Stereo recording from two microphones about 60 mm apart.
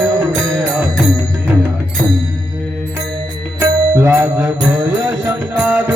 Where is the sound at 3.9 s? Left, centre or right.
Right.